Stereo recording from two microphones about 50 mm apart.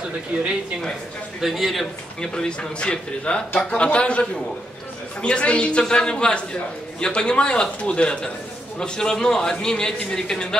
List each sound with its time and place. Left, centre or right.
1.4 s a man's voice: centre
2.3 s a man's voice: centre